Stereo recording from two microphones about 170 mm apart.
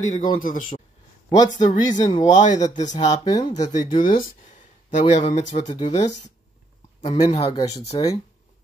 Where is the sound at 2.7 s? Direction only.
45° left (ahead or behind).